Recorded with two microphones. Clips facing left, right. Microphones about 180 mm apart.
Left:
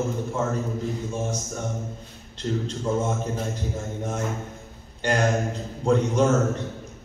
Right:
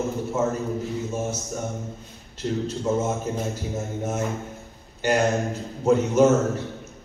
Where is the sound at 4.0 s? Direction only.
5° right (ahead or behind).